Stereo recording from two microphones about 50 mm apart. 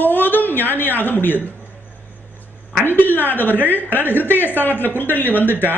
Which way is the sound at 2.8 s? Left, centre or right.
Left.